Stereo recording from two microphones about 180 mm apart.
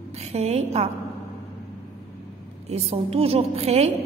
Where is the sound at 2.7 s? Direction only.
35° right (ahead or behind).